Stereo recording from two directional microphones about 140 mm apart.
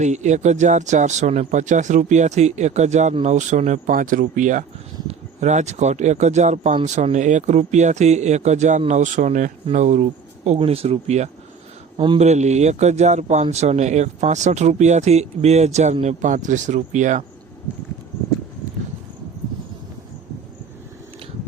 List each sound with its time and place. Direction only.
0.0 s speech: 55° right (ahead or behind)
10.6 s speech: 45° right (ahead or behind)
11.9 s speech: 35° right (ahead or behind)
12.2 s speech: 55° right (ahead or behind)